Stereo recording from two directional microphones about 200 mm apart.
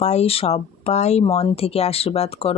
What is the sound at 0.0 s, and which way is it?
Speech, 30° left (ahead or behind).